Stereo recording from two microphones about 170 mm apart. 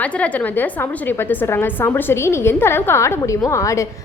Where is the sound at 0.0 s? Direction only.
10° left (ahead or behind).